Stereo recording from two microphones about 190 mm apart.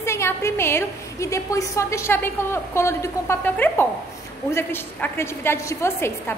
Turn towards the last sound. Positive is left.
turn(degrees=15)  # may be behind; listen again after turning